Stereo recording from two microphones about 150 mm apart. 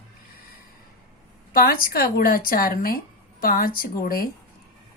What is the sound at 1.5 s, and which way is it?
A woman's voice, 75° left (ahead or behind).